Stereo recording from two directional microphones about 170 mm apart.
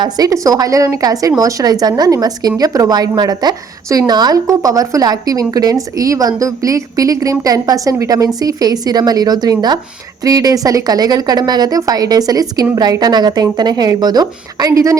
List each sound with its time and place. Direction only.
0.0 s a woman's voice: 20° right (ahead or behind)